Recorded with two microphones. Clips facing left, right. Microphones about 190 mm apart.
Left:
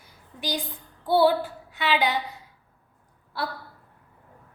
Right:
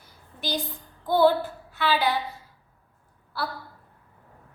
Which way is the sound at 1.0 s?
10° left (ahead or behind).